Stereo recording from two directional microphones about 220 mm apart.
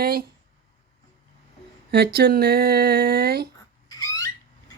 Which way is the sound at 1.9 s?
45° right (ahead or behind).